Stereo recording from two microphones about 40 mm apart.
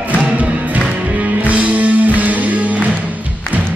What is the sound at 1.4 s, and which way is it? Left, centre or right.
Music, right.